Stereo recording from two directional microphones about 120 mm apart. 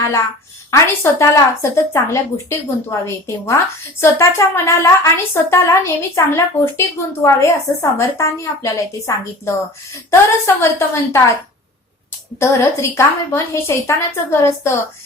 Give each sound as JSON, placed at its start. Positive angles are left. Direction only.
{"t": 0.7, "sound": "a woman's voice", "side_deg": 20}
{"t": 12.4, "sound": "a woman's voice", "side_deg": 20}